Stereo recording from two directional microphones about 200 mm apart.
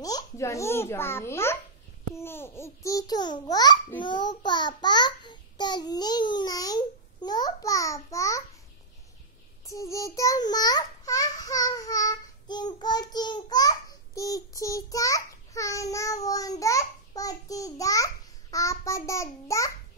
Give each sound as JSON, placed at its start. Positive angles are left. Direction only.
{"t": 0.0, "sound": "a child's voice", "side_deg": 15}
{"t": 9.7, "sound": "a child's voice", "side_deg": 15}